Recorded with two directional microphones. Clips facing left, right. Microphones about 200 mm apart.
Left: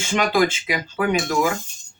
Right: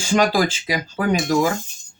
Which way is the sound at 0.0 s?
35° right (ahead or behind).